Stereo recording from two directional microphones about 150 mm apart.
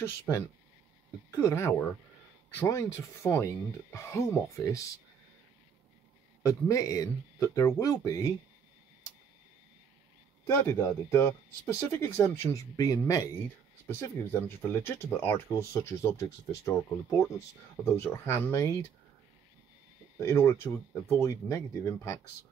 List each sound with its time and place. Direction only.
0.3 s speech: 15° left (ahead or behind)
6.4 s speech: 20° left (ahead or behind)
10.4 s speech: 15° left (ahead or behind)
20.2 s speech: 15° left (ahead or behind)